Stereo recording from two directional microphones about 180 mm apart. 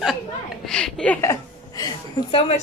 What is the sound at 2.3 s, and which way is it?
Speech, 35° left (ahead or behind).